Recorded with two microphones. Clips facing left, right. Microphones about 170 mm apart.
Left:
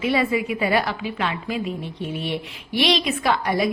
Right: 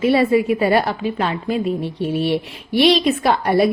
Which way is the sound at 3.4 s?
60° right (ahead or behind).